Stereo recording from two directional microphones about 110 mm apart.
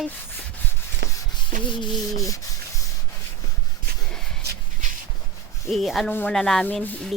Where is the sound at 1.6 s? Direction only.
45° left (ahead or behind).